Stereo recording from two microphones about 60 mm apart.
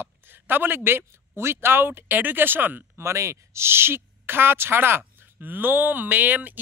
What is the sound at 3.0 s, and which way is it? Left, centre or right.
A man's voice, right.